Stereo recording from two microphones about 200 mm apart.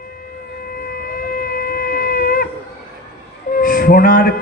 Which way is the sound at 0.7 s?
45° left (ahead or behind).